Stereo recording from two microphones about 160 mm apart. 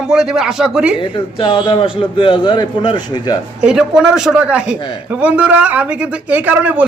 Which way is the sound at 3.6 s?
5° right (ahead or behind).